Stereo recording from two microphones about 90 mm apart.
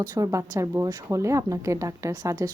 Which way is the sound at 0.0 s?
45° right (ahead or behind).